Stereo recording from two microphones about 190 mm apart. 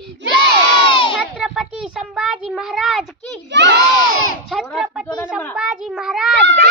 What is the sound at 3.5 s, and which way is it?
Speech, 65° right (ahead or behind).